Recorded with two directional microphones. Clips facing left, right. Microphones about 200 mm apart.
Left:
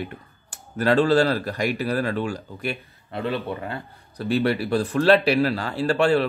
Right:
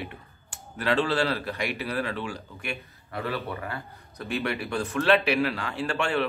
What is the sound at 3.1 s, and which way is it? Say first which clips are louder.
Speech: left 5 dB; 25° left (ahead or behind).